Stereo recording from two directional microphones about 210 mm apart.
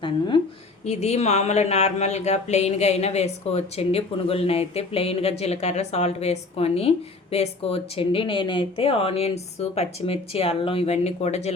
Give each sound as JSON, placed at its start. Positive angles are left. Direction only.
{"t": 0.9, "sound": "speech", "side_deg": 30}